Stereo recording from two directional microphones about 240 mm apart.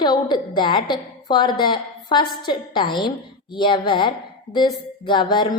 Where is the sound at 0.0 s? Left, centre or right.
Centre.